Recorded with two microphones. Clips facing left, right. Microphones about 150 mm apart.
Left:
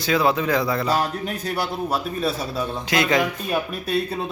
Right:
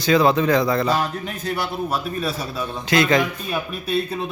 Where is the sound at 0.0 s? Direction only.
5° left (ahead or behind).